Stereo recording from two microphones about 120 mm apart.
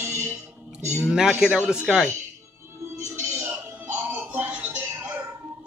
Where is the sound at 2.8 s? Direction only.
25° right (ahead or behind).